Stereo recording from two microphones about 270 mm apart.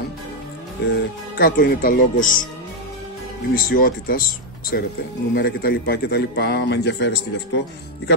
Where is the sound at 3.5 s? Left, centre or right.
Left.